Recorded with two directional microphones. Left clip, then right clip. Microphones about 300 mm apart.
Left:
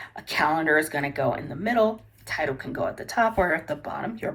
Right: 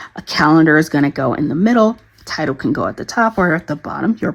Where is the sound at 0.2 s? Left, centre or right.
Centre.